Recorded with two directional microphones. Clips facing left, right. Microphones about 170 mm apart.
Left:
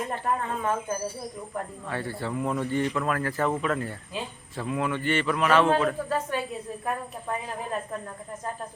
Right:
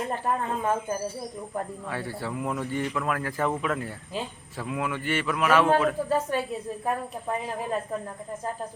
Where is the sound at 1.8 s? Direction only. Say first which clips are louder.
Left 1 dB; 10° right (ahead or behind).